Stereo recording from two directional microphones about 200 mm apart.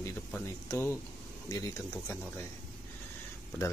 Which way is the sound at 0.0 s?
15° left (ahead or behind).